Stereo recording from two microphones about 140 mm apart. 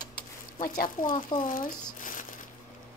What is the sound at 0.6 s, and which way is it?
Speech, 75° left (ahead or behind).